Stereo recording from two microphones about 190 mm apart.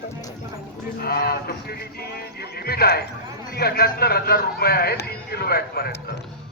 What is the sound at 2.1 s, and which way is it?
Music, 55° left (ahead or behind).